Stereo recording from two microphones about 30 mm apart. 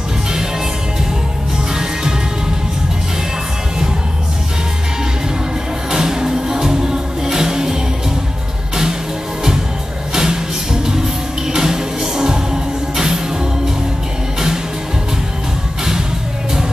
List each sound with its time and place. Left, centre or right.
1.7 s music: centre
5.9 s music: right
10.1 s music: right